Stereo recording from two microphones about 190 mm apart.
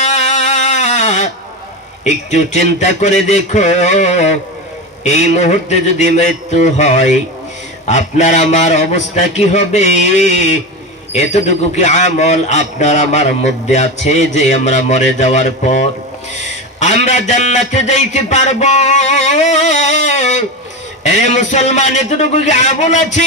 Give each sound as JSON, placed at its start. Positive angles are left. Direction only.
{"t": 0.0, "sound": "music", "side_deg": 35}
{"t": 2.0, "sound": "a man's voice", "side_deg": 35}